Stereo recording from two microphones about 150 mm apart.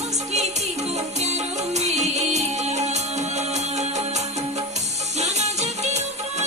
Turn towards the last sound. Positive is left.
turn(degrees=-50)  # may be behind; listen again after turning